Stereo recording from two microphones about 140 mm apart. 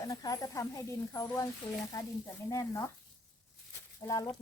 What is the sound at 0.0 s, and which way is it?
Speech, 25° left (ahead or behind).